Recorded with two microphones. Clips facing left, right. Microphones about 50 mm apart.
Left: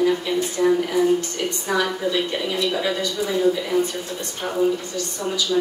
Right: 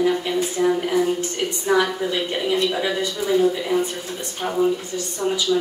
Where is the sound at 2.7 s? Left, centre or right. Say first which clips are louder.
Even; centre.